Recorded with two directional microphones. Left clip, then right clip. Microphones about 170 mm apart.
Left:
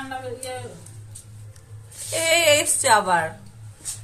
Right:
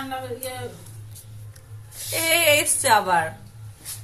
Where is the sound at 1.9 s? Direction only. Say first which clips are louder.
Left 1 dB; 15° left (ahead or behind).